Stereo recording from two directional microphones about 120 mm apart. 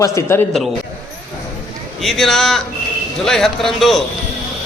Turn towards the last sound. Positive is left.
turn(degrees=0)  # may be behind; listen again after turning